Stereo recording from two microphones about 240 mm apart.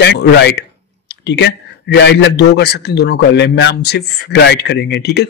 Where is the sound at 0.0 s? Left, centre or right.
Left.